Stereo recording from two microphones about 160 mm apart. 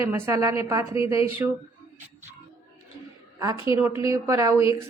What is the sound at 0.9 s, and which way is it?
Speech, 35° left (ahead or behind).